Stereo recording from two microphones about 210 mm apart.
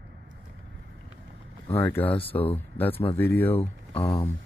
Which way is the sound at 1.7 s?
10° left (ahead or behind).